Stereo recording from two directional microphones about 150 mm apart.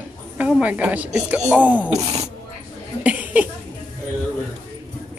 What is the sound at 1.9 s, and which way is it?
Speech, 45° right (ahead or behind).